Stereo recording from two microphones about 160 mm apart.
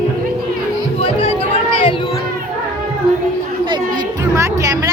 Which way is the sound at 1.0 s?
35° left (ahead or behind).